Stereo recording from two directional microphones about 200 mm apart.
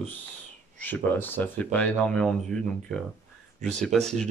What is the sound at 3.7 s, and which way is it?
Speech, 5° left (ahead or behind).